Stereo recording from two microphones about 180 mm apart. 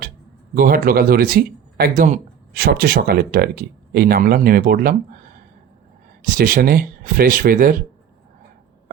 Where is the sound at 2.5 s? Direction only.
60° right (ahead or behind).